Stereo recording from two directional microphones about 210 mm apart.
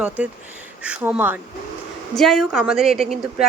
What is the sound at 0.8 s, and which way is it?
Speech, 5° right (ahead or behind).